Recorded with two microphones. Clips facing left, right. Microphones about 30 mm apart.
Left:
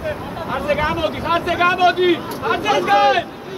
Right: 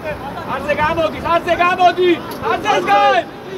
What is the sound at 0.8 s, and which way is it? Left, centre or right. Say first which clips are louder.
Speech: right 3 dB; centre.